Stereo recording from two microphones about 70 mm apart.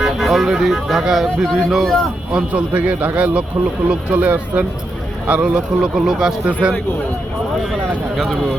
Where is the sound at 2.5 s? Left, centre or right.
Right.